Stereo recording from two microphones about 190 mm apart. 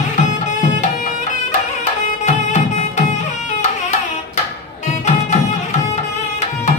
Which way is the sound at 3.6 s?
40° left (ahead or behind).